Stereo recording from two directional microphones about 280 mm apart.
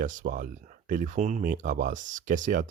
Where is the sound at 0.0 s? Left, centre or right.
Right.